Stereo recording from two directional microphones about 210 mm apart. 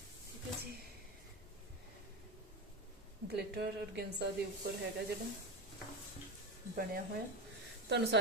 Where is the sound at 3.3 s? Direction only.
50° right (ahead or behind).